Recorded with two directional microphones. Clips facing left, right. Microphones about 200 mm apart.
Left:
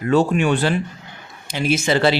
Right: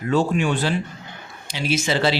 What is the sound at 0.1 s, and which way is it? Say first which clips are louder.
A man's voice: left 3 dB; 60° left (ahead or behind).